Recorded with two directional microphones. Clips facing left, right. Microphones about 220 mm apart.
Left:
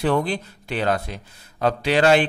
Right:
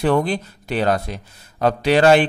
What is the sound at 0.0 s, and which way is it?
Speech, 45° right (ahead or behind).